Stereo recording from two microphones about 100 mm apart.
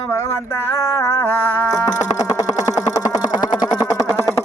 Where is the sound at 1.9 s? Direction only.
35° left (ahead or behind).